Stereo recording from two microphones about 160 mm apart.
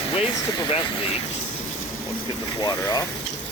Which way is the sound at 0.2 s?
35° left (ahead or behind).